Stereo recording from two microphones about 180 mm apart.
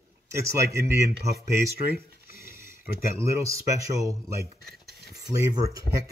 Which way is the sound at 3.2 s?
15° right (ahead or behind).